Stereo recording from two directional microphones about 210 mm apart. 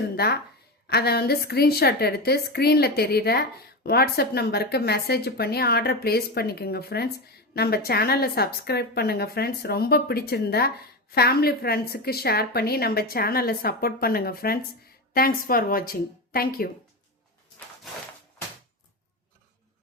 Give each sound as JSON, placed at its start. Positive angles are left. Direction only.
{"t": 0.9, "sound": "a woman's voice", "side_deg": 50}